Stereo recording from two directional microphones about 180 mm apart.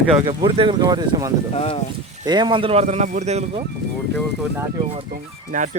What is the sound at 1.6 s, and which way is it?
Speech, 35° left (ahead or behind).